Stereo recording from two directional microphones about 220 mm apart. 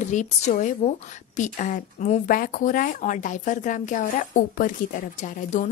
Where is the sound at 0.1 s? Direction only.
35° left (ahead or behind).